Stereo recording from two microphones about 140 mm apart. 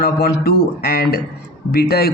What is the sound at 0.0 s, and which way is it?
A man's voice, 90° left.